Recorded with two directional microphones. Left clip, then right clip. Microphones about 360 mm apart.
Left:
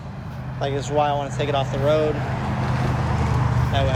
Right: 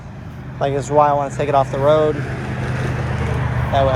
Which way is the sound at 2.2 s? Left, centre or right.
Centre.